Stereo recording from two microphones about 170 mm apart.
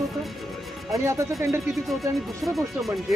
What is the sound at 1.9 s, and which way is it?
Speech, centre (ahead or behind).